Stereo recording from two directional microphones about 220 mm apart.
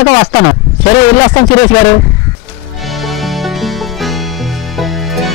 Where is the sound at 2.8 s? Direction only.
Centre (ahead or behind).